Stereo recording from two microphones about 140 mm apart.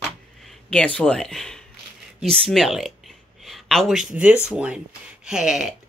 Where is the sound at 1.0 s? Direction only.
5° left (ahead or behind).